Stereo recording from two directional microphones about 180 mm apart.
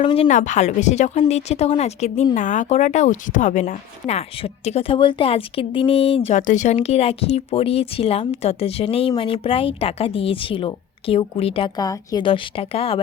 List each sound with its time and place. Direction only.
0.0 s speech: 30° left (ahead or behind)
0.3 s speech: 40° left (ahead or behind)